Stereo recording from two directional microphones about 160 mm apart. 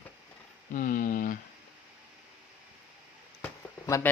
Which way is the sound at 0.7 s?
60° left (ahead or behind).